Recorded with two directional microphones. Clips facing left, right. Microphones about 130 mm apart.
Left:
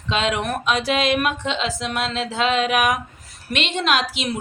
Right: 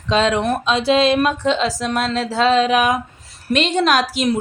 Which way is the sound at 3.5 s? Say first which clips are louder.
Right 5 dB; 40° right (ahead or behind).